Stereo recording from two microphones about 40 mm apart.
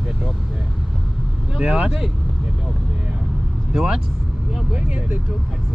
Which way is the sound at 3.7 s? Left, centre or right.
Right.